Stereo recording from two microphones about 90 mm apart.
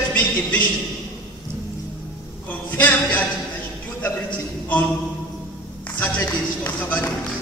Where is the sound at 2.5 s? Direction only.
20° left (ahead or behind).